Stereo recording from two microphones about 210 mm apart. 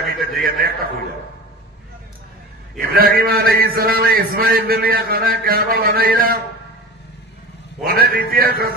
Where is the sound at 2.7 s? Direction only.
45° right (ahead or behind).